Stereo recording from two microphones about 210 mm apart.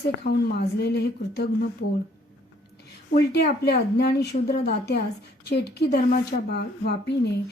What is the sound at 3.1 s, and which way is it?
A woman's voice, 50° left (ahead or behind).